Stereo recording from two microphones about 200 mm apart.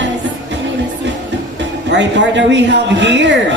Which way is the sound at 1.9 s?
60° right (ahead or behind).